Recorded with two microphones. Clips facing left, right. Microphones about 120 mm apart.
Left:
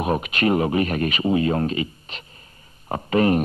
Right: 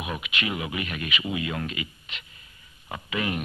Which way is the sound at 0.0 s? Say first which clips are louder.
Left 10 dB; 40° left (ahead or behind).